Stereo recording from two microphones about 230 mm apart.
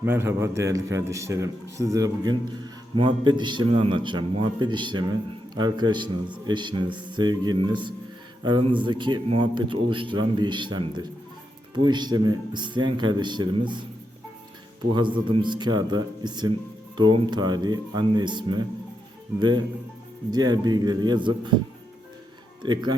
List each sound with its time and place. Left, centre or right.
0.0 s a man's voice: centre
14.9 s a man's voice: right
22.6 s speech: centre